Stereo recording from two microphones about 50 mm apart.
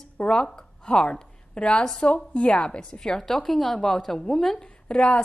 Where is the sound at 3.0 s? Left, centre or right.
Centre.